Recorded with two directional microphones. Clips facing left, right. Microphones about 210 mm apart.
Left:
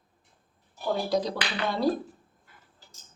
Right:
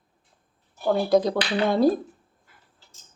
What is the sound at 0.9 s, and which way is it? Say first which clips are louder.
Speech: right 7 dB; 55° right (ahead or behind).